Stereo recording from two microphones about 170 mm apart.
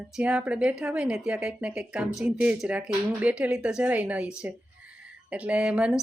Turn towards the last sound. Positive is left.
turn(degrees=-5)  # may be behind; listen again after turning